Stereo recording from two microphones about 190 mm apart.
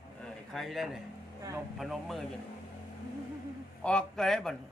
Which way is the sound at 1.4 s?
15° right (ahead or behind).